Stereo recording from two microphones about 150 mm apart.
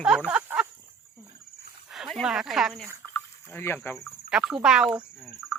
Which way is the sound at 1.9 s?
Centre (ahead or behind).